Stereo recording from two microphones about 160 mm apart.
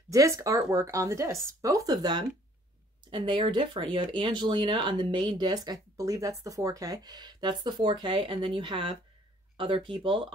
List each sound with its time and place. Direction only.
0.1 s speech: 20° right (ahead or behind)